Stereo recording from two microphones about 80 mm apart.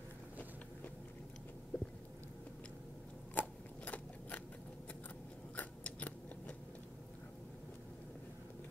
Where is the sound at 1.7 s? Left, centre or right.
Centre.